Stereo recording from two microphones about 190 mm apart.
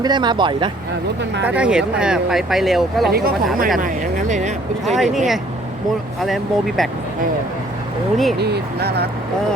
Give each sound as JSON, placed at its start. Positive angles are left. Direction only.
{"t": 0.0, "sound": "speech", "side_deg": -25}
{"t": 1.5, "sound": "speech", "side_deg": -5}
{"t": 3.1, "sound": "speech", "side_deg": -55}
{"t": 4.9, "sound": "speech", "side_deg": 0}
{"t": 8.4, "sound": "speech", "side_deg": -60}